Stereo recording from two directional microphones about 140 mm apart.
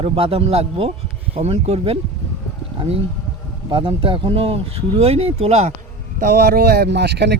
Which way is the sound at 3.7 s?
40° right (ahead or behind).